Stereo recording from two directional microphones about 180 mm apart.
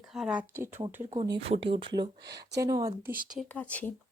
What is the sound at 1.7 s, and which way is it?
Speech, 25° right (ahead or behind).